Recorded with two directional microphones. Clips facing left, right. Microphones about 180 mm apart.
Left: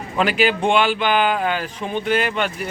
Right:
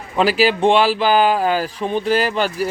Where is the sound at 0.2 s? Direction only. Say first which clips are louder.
Right 3 dB; 35° right (ahead or behind).